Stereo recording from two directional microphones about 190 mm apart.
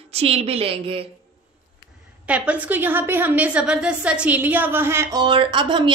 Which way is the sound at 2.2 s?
5° right (ahead or behind).